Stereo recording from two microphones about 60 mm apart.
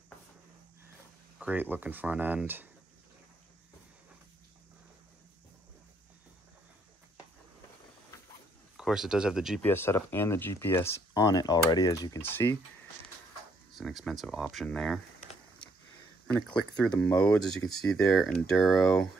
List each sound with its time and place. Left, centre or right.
1.4 s speech: right
8.7 s speech: centre
9.6 s speech: left
11.1 s speech: left
12.2 s speech: left
13.7 s speech: centre
16.3 s speech: centre